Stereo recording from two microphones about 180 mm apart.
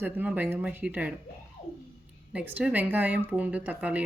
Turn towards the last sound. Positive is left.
turn(degrees=-10)  # may be behind; listen again after turning